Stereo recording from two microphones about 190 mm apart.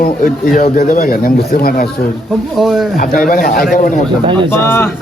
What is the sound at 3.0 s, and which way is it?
Speech, 45° left (ahead or behind).